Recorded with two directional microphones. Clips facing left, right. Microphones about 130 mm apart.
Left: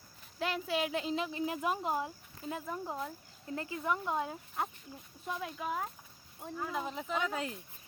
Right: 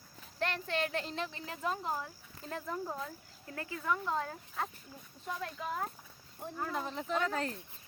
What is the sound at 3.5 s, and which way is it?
Speech, 20° left (ahead or behind).